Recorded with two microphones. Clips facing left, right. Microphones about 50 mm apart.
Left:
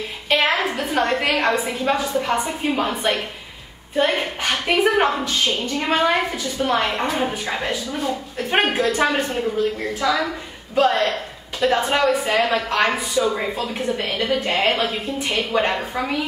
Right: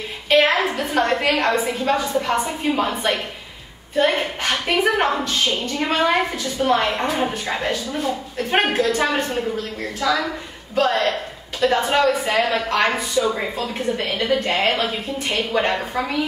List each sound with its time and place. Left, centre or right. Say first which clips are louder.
0.3 s a woman's voice: right 3 dB; centre